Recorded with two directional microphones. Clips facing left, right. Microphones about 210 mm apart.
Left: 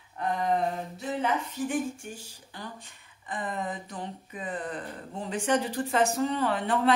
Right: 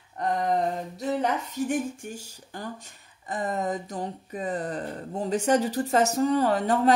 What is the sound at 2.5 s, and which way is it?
Speech, 45° right (ahead or behind).